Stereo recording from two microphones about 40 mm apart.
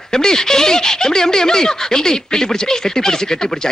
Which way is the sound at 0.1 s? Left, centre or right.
Centre.